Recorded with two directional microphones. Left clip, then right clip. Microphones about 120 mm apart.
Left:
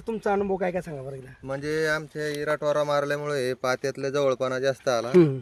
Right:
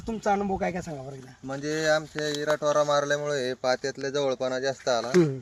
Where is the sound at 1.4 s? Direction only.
85° left.